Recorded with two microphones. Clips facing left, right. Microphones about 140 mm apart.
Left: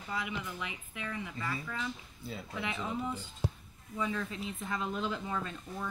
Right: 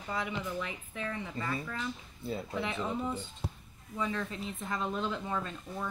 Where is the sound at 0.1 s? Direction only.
40° right (ahead or behind).